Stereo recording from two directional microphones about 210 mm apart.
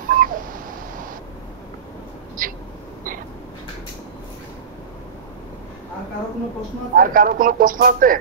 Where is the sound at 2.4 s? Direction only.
40° right (ahead or behind).